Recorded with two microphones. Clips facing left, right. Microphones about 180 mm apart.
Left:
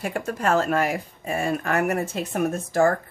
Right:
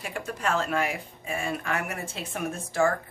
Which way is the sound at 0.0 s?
45° left (ahead or behind).